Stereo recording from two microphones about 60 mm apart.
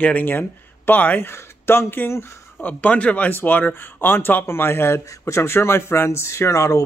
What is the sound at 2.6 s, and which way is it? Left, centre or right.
Speech, left.